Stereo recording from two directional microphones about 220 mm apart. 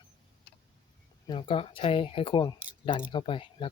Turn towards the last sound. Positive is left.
turn(degrees=25)  # may be behind; listen again after turning